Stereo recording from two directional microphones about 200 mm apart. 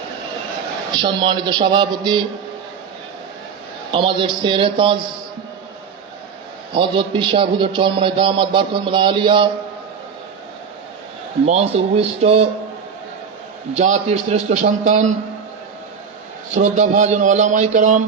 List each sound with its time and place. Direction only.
1.0 s a man's voice: 25° right (ahead or behind)
3.9 s a man's voice: 25° right (ahead or behind)
6.7 s a man's voice: 25° right (ahead or behind)
11.4 s speech: 30° right (ahead or behind)
13.7 s speech: 35° right (ahead or behind)
16.6 s speech: 35° right (ahead or behind)